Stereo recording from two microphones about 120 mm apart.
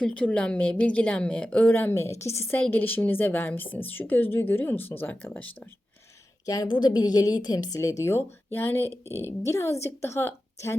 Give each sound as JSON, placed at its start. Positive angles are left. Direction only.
{"t": 0.0, "sound": "a woman's voice", "side_deg": 10}
{"t": 6.4, "sound": "a woman's voice", "side_deg": 30}